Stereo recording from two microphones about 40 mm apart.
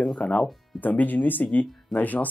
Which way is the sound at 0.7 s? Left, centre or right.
Left.